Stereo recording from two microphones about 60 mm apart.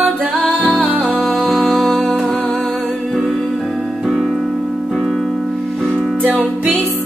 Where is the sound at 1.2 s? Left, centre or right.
Centre.